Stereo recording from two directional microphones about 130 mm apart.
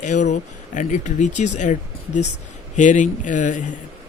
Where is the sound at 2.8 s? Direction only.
75° left (ahead or behind).